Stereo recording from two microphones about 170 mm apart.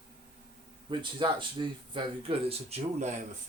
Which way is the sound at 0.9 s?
30° right (ahead or behind).